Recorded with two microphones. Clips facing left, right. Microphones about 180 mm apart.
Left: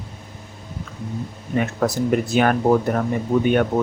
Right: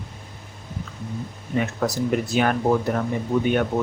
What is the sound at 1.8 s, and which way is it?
Speech, 60° left (ahead or behind).